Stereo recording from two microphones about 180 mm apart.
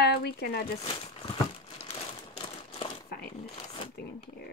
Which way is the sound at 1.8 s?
35° left (ahead or behind).